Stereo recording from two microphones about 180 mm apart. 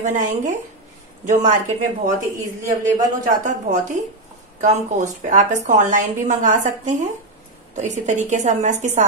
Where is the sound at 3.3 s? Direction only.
45° right (ahead or behind).